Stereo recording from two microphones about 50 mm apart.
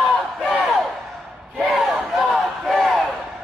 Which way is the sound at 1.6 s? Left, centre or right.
Centre.